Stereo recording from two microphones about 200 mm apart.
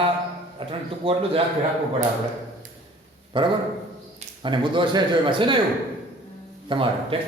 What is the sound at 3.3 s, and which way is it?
A man's voice, 25° right (ahead or behind).